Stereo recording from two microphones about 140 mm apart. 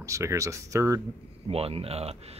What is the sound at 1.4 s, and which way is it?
Speech, 45° right (ahead or behind).